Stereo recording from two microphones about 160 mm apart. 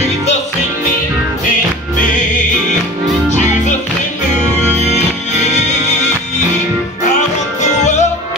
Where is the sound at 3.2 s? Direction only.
45° left (ahead or behind).